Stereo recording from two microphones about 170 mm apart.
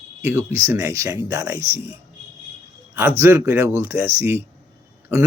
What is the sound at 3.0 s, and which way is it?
Speech, 15° right (ahead or behind).